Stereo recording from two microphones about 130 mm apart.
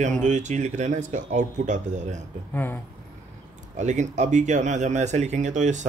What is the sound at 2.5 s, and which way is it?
Speech, 15° left (ahead or behind).